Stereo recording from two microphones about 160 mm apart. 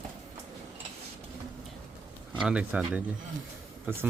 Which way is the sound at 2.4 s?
5° right (ahead or behind).